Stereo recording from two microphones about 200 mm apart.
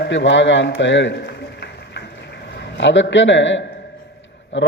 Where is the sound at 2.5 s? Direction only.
60° left (ahead or behind).